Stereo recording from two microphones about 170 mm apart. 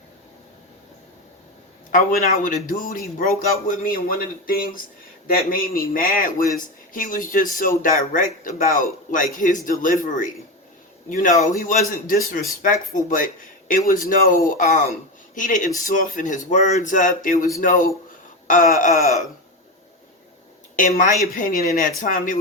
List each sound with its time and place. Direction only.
1.9 s a man's voice: 50° left (ahead or behind)
20.7 s speech: 50° left (ahead or behind)